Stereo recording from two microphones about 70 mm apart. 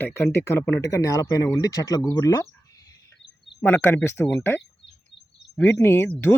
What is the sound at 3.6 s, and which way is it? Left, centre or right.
Speech, left.